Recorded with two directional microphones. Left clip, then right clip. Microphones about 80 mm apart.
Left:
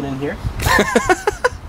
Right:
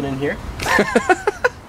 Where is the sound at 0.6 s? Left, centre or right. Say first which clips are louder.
Left 2 dB; centre.